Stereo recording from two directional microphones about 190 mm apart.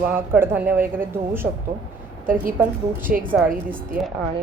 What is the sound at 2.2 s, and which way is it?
Speech, 45° right (ahead or behind).